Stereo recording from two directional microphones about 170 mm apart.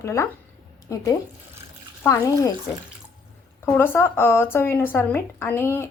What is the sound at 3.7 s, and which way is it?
Speech, 15° left (ahead or behind).